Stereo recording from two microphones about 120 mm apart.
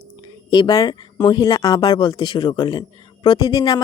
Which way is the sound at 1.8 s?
45° left (ahead or behind).